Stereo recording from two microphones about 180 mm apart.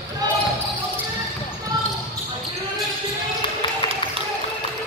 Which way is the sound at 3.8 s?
25° left (ahead or behind).